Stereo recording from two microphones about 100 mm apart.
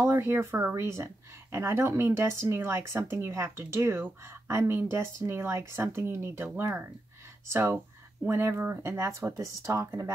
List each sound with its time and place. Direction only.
0.0 s speech: 25° right (ahead or behind)